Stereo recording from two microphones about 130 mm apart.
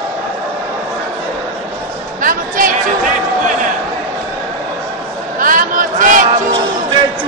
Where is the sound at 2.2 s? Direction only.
90° right.